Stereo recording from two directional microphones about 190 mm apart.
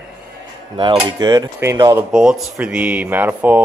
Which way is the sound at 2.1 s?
5° right (ahead or behind).